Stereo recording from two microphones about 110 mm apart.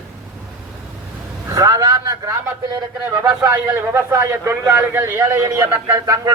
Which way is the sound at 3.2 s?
20° right (ahead or behind).